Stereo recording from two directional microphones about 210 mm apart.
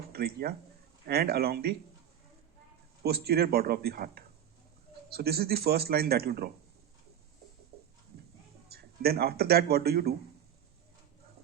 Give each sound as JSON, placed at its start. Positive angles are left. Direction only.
{"t": 0.1, "sound": "speech", "side_deg": -45}
{"t": 3.0, "sound": "speech", "side_deg": -50}
{"t": 7.7, "sound": "a sound", "side_deg": -45}
{"t": 8.7, "sound": "speech", "side_deg": -45}